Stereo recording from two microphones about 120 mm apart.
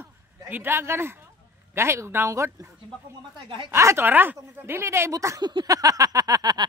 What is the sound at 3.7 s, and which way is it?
Speech, 20° right (ahead or behind).